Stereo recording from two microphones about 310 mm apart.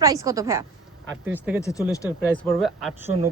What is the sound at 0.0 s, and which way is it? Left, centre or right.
A man's voice, centre.